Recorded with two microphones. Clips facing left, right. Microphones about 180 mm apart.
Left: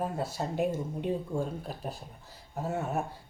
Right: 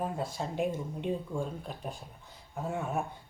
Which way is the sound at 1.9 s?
5° left (ahead or behind).